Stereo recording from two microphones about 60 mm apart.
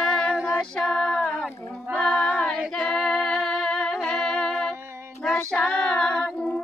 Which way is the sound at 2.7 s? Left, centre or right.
Centre.